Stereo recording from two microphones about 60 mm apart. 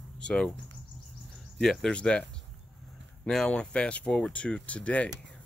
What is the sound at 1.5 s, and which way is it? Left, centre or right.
Speech, centre.